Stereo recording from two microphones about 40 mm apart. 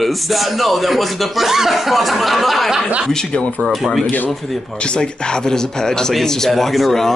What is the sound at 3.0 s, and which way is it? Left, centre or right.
Speech, centre.